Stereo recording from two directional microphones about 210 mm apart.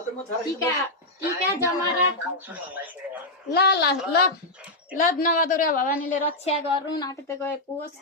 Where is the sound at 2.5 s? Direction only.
10° right (ahead or behind).